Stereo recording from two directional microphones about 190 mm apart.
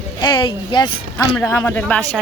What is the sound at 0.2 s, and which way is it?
Speech, 25° left (ahead or behind).